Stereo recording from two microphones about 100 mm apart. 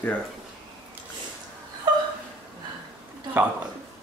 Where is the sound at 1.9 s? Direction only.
45° right (ahead or behind).